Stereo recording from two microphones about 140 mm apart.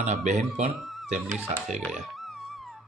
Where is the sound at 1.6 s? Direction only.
Centre (ahead or behind).